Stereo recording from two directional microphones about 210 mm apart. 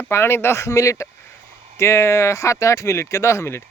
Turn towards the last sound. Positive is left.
turn(degrees=10)  # may be behind; listen again after turning